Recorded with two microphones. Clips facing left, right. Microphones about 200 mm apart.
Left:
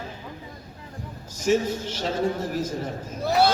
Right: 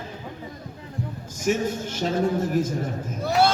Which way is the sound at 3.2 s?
Centre (ahead or behind).